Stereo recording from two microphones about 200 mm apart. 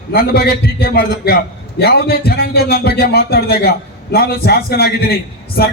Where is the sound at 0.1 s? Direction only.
50° left (ahead or behind).